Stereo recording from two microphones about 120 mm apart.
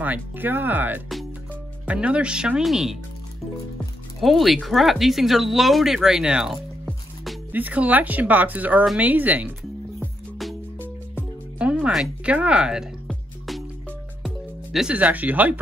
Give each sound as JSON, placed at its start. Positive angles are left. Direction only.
{"t": 0.0, "sound": "speech", "side_deg": -15}
{"t": 4.2, "sound": "speech", "side_deg": 0}
{"t": 9.6, "sound": "music", "side_deg": 0}
{"t": 10.8, "sound": "music", "side_deg": -15}
{"t": 14.2, "sound": "speech", "side_deg": -5}